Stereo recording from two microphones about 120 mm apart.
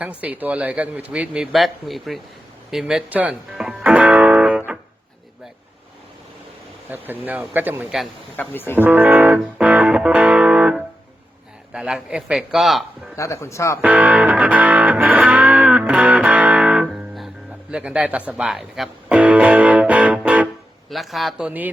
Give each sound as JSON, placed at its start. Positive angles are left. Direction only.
{"t": 0.0, "sound": "a man's voice", "side_deg": -10}
{"t": 2.6, "sound": "music", "side_deg": -5}
{"t": 7.1, "sound": "a man's voice", "side_deg": -15}
{"t": 8.4, "sound": "speech", "side_deg": 15}
{"t": 8.7, "sound": "music", "side_deg": -15}
{"t": 11.7, "sound": "a man's voice", "side_deg": -5}
{"t": 13.1, "sound": "speech", "side_deg": 25}
{"t": 13.8, "sound": "music", "side_deg": -10}
{"t": 18.3, "sound": "a man's voice", "side_deg": -5}
{"t": 19.0, "sound": "music", "side_deg": -10}
{"t": 20.9, "sound": "a man's voice", "side_deg": 0}